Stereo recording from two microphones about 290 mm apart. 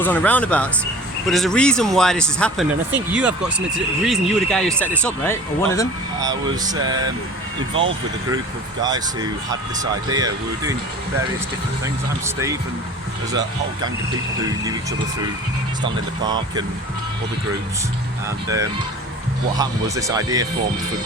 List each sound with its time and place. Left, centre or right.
0.0 s speech: centre
6.1 s speech: centre
7.7 s speech: right
8.8 s speech: centre
12.2 s speech: centre
14.4 s speech: centre
15.8 s speech: centre
18.4 s speech: centre